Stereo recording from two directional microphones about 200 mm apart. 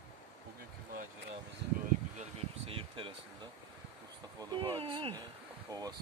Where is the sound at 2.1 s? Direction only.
30° right (ahead or behind).